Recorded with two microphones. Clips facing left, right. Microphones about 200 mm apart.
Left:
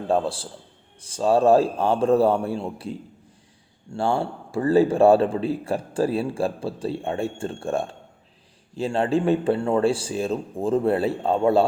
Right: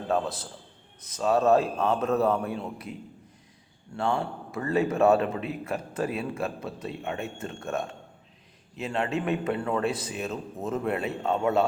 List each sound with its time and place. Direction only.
0.1 s a man's voice: 30° left (ahead or behind)